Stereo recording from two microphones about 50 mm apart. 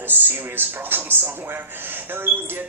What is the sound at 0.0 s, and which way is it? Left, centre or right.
A man's voice, right.